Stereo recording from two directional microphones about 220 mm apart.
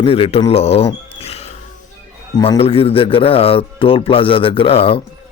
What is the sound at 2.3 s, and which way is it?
Speech, 20° left (ahead or behind).